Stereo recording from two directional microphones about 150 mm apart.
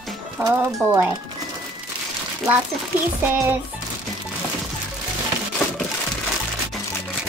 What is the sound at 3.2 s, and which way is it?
Speech, 15° right (ahead or behind).